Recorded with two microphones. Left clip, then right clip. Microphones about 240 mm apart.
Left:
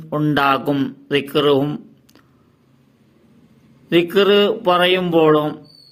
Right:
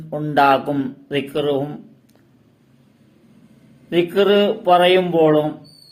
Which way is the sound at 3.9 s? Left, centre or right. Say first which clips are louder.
Left 2 dB; left.